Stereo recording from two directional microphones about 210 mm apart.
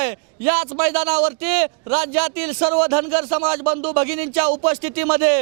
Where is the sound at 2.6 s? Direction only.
25° right (ahead or behind).